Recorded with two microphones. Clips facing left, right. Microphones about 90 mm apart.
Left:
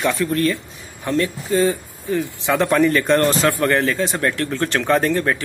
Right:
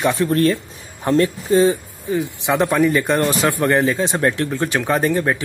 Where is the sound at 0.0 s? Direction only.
25° right (ahead or behind).